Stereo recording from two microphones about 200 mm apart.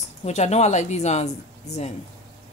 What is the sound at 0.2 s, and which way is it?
Speech, 35° left (ahead or behind).